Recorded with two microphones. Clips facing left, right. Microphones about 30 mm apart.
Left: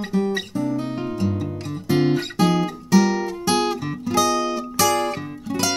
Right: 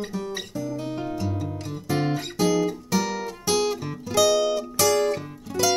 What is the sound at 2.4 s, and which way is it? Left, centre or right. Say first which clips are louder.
Guitar: even; left.